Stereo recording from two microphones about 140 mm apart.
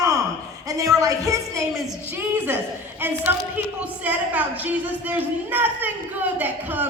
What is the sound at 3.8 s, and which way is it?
A woman's voice, 10° right (ahead or behind).